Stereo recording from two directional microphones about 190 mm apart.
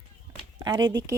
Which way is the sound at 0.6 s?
20° right (ahead or behind).